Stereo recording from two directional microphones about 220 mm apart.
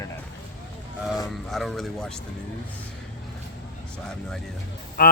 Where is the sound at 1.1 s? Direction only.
Centre (ahead or behind).